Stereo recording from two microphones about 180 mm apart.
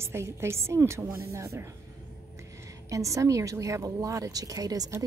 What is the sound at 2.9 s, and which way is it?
A woman's voice, 15° right (ahead or behind).